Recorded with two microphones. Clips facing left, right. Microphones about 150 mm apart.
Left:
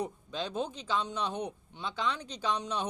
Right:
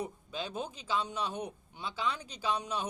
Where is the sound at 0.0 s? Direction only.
10° right (ahead or behind).